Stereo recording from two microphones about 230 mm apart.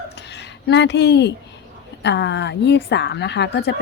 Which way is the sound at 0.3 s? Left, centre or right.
Left.